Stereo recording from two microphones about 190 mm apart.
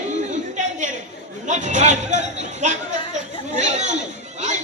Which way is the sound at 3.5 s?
40° right (ahead or behind).